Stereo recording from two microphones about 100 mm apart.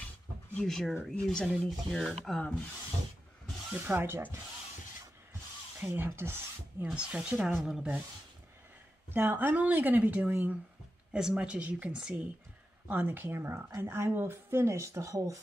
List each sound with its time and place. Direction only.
0.6 s speech: 5° left (ahead or behind)
3.7 s speech: 20° right (ahead or behind)
5.8 s speech: 20° right (ahead or behind)
6.8 s speech: 10° right (ahead or behind)
9.1 s speech: 20° right (ahead or behind)